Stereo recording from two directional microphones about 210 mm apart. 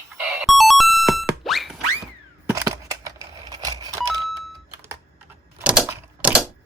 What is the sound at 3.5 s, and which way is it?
Telephone dialing, 20° right (ahead or behind).